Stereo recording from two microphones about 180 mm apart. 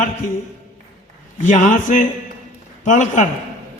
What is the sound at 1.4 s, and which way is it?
A man's voice, 45° left (ahead or behind).